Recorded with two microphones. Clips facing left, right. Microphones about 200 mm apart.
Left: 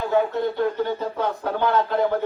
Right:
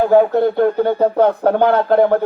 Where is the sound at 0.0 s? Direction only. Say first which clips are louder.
Right 9 dB; 55° right (ahead or behind).